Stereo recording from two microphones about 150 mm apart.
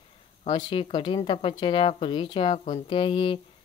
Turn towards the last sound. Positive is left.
turn(degrees=35)  # may be behind; listen again after turning